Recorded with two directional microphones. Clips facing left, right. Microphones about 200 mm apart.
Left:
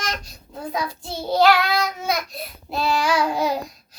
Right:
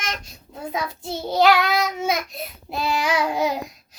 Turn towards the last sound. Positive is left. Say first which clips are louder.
# left 1 dB
turn(degrees=-20)  # may be behind; listen again after turning